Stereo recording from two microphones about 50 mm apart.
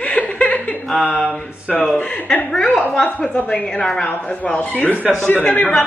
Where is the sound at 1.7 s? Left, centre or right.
Centre.